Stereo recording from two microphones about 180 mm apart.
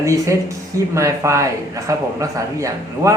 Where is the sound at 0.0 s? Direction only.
15° right (ahead or behind).